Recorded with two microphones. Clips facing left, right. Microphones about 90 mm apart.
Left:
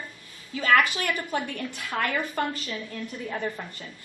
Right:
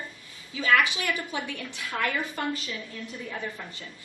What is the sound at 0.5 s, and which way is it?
A woman's voice, 45° left (ahead or behind).